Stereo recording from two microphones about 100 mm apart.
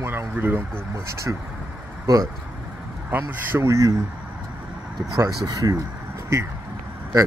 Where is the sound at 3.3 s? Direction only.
25° right (ahead or behind).